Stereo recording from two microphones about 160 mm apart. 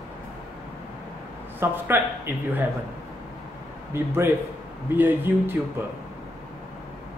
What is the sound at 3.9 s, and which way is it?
Speech, 15° right (ahead or behind).